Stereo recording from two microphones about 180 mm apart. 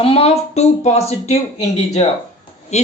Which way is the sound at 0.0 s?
35° left (ahead or behind).